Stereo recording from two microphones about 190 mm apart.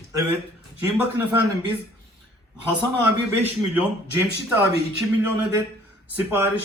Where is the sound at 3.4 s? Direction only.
10° right (ahead or behind).